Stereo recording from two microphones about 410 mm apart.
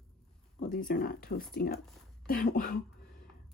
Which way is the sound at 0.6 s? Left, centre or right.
Centre.